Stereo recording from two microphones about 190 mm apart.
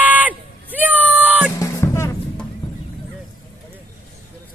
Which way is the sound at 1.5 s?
15° left (ahead or behind).